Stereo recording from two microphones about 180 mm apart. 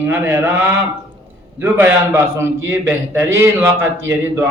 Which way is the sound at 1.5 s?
10° right (ahead or behind).